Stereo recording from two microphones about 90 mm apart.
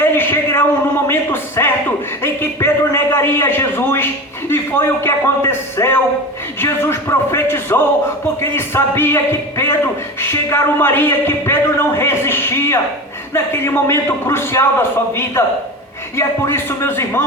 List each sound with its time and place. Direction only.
0.0 s a man's voice: 25° left (ahead or behind)